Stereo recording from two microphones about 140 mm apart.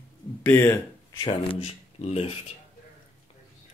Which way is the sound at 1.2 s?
45° left (ahead or behind).